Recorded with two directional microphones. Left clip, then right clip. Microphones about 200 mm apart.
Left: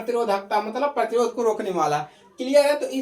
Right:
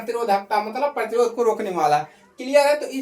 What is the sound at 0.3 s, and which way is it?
Speech, 10° right (ahead or behind).